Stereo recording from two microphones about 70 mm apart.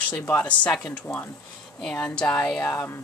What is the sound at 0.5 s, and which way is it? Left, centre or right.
Speech, left.